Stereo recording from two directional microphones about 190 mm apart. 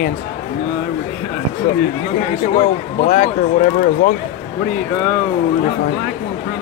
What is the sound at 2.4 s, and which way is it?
Speech, 45° left (ahead or behind).